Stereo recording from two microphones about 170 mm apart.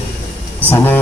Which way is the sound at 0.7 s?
10° left (ahead or behind).